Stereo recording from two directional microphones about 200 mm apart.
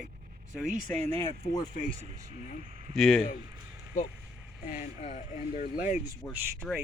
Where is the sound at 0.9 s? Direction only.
35° right (ahead or behind).